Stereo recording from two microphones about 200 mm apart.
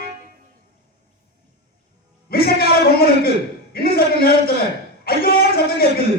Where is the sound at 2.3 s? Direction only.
50° left (ahead or behind).